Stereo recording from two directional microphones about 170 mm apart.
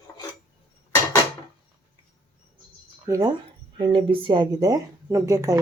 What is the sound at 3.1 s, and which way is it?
Speech, 20° right (ahead or behind).